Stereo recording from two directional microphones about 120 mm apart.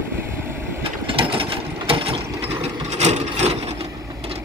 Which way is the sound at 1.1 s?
50° right (ahead or behind).